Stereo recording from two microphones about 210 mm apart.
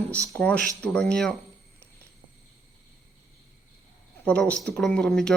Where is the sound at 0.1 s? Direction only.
5° left (ahead or behind).